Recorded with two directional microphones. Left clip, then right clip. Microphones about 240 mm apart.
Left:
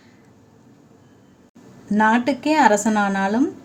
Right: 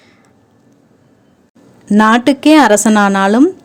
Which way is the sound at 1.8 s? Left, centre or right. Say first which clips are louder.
Right 8 dB; right.